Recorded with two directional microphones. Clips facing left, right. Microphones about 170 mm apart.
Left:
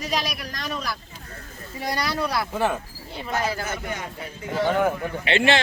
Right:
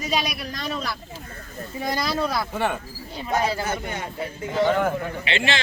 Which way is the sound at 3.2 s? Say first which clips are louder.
Right 3 dB; 25° right (ahead or behind).